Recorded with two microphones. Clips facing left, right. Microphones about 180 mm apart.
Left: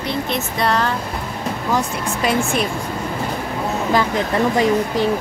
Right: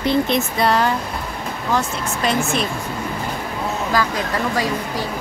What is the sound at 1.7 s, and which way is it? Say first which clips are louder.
Speech: right 1 dB; 10° left (ahead or behind).